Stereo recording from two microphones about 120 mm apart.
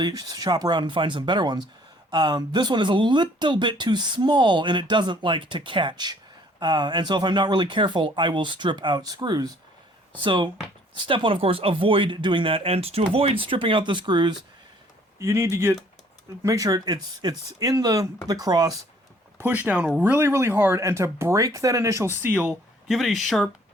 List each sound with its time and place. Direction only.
0.0 s speech: 35° right (ahead or behind)
15.2 s speech: 25° right (ahead or behind)
19.4 s speech: 15° right (ahead or behind)
22.2 s speech: 10° right (ahead or behind)